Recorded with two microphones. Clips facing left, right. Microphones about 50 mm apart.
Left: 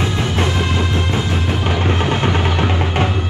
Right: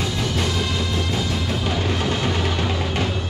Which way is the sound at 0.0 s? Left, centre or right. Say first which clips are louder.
Left 5 dB; left.